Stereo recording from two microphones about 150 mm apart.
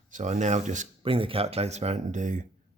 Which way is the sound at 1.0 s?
35° right (ahead or behind).